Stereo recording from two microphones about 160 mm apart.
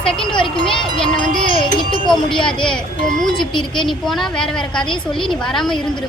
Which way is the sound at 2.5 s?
5° left (ahead or behind).